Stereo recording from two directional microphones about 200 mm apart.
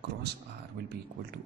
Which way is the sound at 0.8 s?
50° right (ahead or behind).